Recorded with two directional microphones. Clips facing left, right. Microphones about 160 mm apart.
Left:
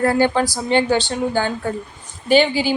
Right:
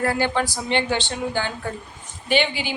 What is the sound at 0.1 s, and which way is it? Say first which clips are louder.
Speech: left 6 dB; 40° left (ahead or behind).